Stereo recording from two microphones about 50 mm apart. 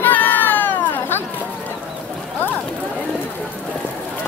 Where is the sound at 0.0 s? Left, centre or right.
Left.